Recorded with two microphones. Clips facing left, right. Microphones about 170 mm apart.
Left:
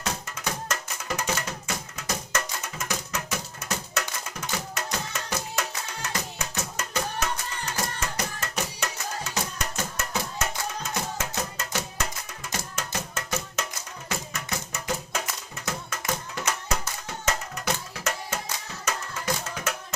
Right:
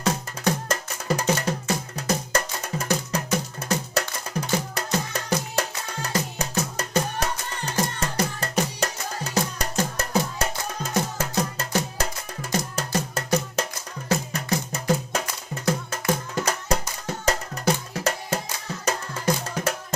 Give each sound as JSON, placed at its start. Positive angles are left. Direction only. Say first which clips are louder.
{"t": 0.0, "sound": "music", "louder": "right 8 dB", "side_deg": -35}